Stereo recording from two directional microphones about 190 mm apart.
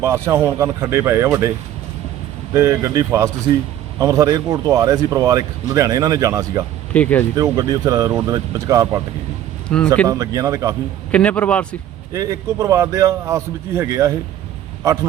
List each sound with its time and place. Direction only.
0.0 s a man's voice: 15° right (ahead or behind)
6.9 s a man's voice: 10° left (ahead or behind)
7.3 s a man's voice: 20° right (ahead or behind)
9.6 s speech: 5° left (ahead or behind)
10.1 s a man's voice: 15° right (ahead or behind)
11.1 s a man's voice: 5° left (ahead or behind)
12.1 s a man's voice: 15° right (ahead or behind)